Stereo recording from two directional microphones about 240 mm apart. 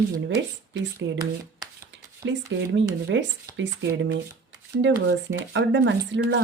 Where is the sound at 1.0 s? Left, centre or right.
Centre.